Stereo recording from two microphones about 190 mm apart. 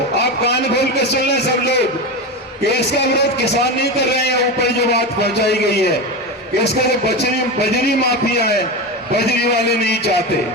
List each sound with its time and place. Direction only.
0.4 s a man's voice: 60° left (ahead or behind)
2.7 s a man's voice: 60° left (ahead or behind)
9.1 s a man's voice: 60° left (ahead or behind)